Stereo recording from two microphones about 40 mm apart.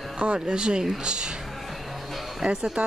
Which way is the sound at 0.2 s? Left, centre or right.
Right.